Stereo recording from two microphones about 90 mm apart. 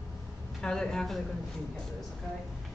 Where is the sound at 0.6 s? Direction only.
5° left (ahead or behind).